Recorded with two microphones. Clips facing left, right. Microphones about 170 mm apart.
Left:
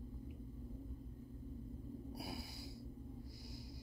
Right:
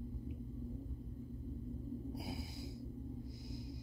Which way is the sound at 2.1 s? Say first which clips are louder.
Right 3 dB; 20° right (ahead or behind).